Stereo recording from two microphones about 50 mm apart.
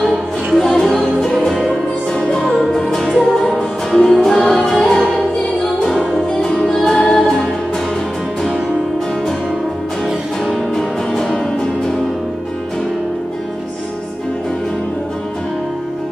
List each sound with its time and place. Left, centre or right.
0.0 s music: centre
0.6 s music: centre
2.1 s music: centre
2.9 s music: centre
10.0 s music: centre